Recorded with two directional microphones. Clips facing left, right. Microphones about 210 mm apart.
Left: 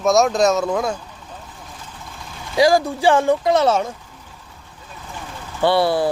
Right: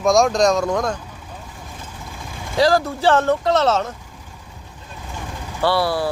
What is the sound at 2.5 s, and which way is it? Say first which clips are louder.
Speech: left 2 dB; 15° left (ahead or behind).